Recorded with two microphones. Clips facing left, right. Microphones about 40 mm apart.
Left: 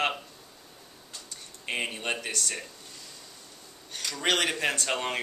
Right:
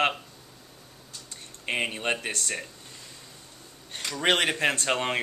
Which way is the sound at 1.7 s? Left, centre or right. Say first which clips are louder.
Right 3 dB; centre.